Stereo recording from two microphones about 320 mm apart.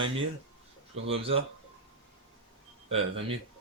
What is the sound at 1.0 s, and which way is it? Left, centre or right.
Speech, centre.